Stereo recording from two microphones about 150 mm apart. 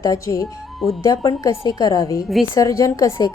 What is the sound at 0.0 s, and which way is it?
A woman's voice, 20° left (ahead or behind).